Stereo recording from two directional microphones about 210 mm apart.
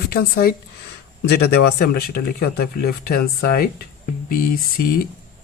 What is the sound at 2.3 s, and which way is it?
Speech, 45° left (ahead or behind).